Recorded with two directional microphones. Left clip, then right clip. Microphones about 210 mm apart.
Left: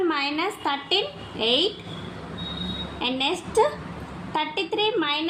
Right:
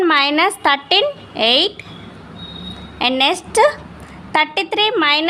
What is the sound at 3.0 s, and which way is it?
A woman's voice, 50° right (ahead or behind).